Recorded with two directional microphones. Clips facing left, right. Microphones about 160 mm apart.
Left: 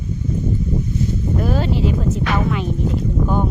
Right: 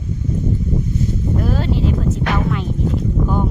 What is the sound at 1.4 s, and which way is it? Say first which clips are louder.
Speech: left 2 dB; centre (ahead or behind).